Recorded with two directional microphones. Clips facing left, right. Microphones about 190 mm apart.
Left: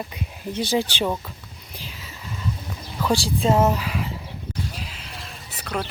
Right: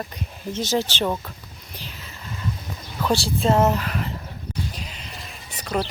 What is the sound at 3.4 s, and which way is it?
Speech, 10° left (ahead or behind).